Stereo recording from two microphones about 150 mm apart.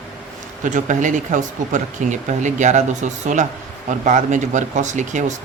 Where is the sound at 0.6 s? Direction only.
55° right (ahead or behind).